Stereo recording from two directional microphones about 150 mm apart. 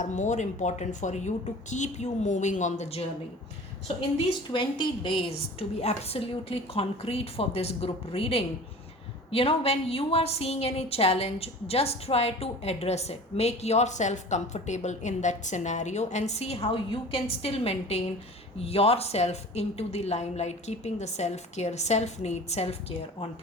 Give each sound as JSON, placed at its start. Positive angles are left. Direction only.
{"t": 0.0, "sound": "a woman's voice", "side_deg": 55}
{"t": 4.5, "sound": "a woman's voice", "side_deg": 35}